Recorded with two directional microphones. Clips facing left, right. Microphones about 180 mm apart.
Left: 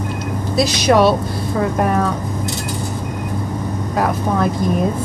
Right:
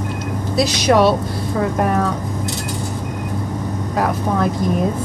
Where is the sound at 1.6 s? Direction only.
25° left (ahead or behind).